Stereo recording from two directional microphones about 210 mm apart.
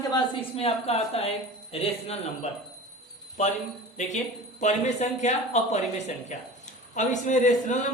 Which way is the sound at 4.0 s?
35° left (ahead or behind).